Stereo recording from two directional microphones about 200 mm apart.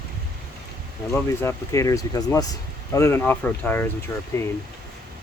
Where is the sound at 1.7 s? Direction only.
15° left (ahead or behind).